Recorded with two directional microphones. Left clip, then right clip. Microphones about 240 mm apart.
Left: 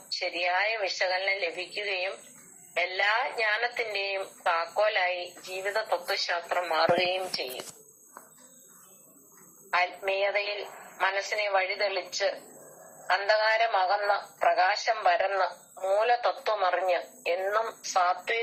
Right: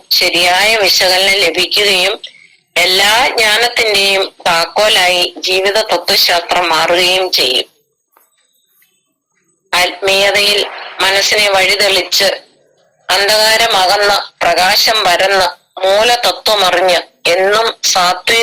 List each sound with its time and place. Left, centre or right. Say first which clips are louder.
0.2 s a man's voice: right 17 dB; right
9.6 s a man's voice: right 15 dB; right